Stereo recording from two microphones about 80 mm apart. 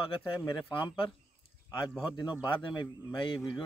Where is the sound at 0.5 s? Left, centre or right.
Left.